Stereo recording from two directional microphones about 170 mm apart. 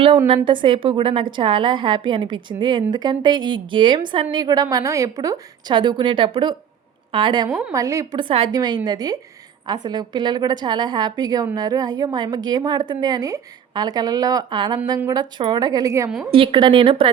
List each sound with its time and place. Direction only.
0.4 s a woman's voice: 30° right (ahead or behind)
16.3 s a woman's voice: 30° right (ahead or behind)